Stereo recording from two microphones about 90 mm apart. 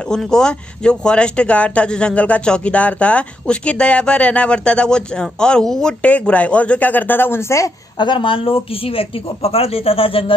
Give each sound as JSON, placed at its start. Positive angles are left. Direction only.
{"t": 0.1, "sound": "speech", "side_deg": 5}
{"t": 8.0, "sound": "speech", "side_deg": 65}